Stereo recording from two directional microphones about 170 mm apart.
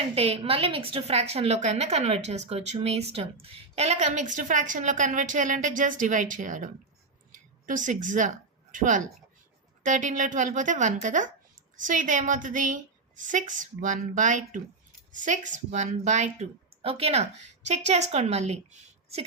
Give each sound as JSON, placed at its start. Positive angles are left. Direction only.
{"t": 0.2, "sound": "a woman's voice", "side_deg": -35}